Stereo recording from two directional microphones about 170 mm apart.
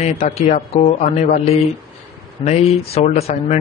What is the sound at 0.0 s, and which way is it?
Speech, 40° left (ahead or behind).